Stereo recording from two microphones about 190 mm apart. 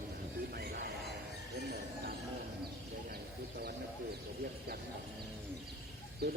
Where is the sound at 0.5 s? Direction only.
55° right (ahead or behind).